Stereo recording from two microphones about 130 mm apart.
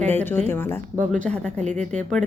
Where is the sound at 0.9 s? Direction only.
75° right (ahead or behind).